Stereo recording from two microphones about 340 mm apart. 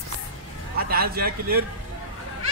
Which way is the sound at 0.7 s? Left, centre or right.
Right.